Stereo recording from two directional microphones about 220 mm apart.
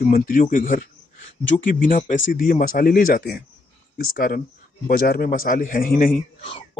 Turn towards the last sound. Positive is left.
turn(degrees=40)  # may be behind; listen again after turning